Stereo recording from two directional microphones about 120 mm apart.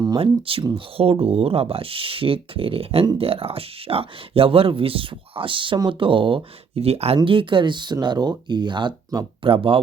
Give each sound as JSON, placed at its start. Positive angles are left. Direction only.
{"t": 0.2, "sound": "speech", "side_deg": -50}
{"t": 7.2, "sound": "speech", "side_deg": -45}